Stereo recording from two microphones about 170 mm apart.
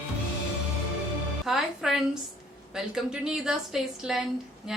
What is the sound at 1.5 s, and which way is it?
Speech, centre (ahead or behind).